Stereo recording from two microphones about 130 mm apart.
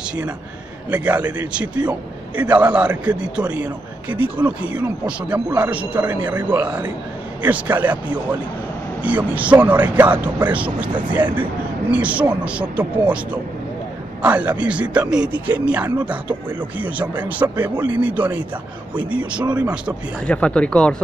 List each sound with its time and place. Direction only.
0.8 s speech: 10° right (ahead or behind)
14.2 s speech: 10° right (ahead or behind)
20.2 s speech: 10° left (ahead or behind)